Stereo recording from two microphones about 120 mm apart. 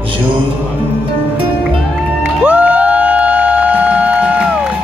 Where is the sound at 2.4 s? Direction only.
10° right (ahead or behind).